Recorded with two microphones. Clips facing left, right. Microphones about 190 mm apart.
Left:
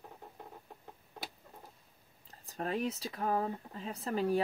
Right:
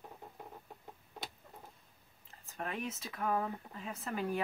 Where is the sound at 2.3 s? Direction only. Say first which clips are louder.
Left 5 dB; 35° left (ahead or behind).